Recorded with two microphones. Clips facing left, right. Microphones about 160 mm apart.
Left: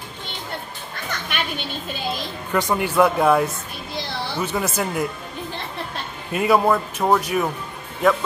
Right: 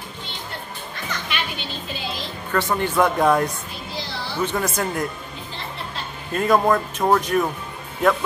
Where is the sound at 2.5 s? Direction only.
15° left (ahead or behind).